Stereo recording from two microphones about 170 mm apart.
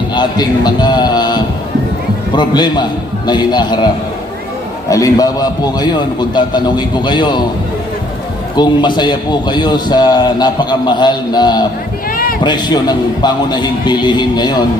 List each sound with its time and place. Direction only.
0.1 s a man's voice: 25° left (ahead or behind)
4.9 s a man's voice: 20° left (ahead or behind)
8.5 s a man's voice: 25° left (ahead or behind)